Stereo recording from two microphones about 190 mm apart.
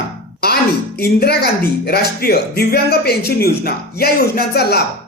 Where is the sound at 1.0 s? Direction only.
55° left (ahead or behind).